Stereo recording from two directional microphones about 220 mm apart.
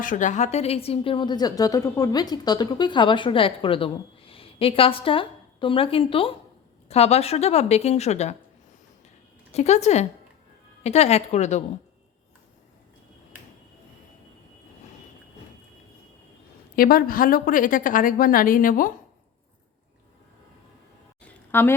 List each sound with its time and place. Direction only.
0.0 s a woman's voice: 35° left (ahead or behind)
9.5 s a woman's voice: 30° left (ahead or behind)
16.7 s a woman's voice: 40° left (ahead or behind)
21.2 s a sound: 10° left (ahead or behind)